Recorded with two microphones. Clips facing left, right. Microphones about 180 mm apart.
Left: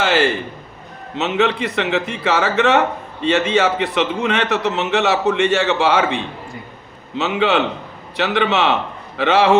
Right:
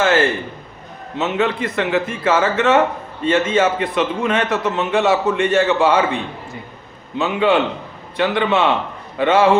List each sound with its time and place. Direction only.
0.0 s a man's voice: 80° left
7.2 s a man's voice: 90° left